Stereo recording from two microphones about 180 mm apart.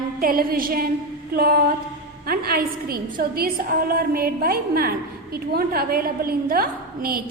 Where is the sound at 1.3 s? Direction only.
55° right (ahead or behind).